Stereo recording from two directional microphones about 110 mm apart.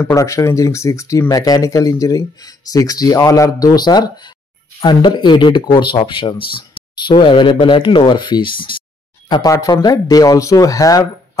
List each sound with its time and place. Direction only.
0.1 s speech: 30° left (ahead or behind); by 8.8 s 50° left (ahead or behind)
9.3 s speech: 35° left (ahead or behind)